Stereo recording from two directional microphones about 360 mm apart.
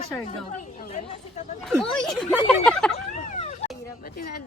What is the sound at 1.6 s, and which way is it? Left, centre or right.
Speech, centre.